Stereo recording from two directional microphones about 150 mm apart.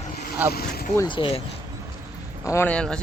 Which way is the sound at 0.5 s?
90° left.